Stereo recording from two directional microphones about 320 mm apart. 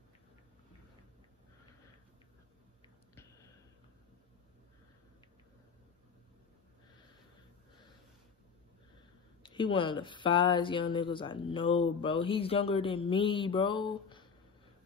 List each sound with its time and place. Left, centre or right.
9.4 s speech: centre